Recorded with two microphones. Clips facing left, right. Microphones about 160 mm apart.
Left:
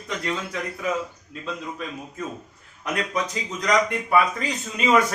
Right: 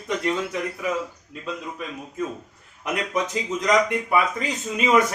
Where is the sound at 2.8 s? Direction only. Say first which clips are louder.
Right 1 dB; 20° right (ahead or behind).